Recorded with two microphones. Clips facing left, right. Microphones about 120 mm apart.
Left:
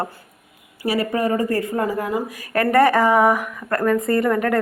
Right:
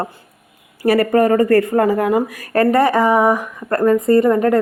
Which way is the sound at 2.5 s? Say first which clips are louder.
Right 2 dB; 25° right (ahead or behind).